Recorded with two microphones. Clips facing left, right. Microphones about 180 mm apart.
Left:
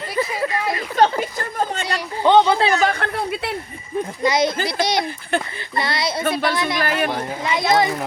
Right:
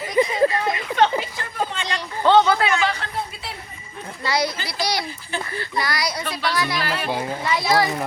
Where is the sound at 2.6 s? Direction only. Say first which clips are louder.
Left 3 dB; 35° left (ahead or behind); by 3.5 s 65° left (ahead or behind).